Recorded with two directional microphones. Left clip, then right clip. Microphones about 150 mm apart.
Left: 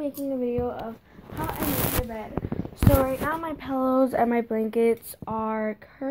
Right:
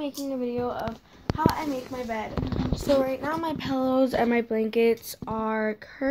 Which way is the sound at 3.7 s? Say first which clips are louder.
Left 2 dB; 10° right (ahead or behind).